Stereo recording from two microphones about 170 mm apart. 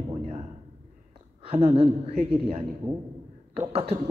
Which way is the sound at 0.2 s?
35° right (ahead or behind).